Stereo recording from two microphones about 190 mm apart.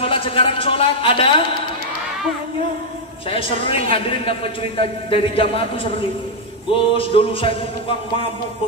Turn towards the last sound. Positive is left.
turn(degrees=30)  # may be behind; listen again after turning